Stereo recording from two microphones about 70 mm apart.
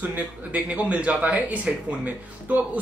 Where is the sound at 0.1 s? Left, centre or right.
Centre.